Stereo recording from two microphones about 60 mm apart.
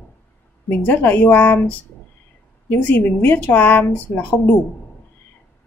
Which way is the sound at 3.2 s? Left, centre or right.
Left.